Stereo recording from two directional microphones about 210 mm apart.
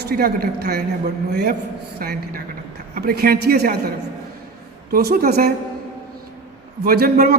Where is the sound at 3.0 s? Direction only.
45° right (ahead or behind).